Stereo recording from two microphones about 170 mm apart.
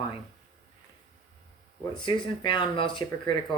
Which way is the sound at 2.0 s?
30° left (ahead or behind).